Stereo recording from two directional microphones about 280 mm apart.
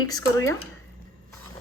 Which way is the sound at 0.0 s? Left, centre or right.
Centre.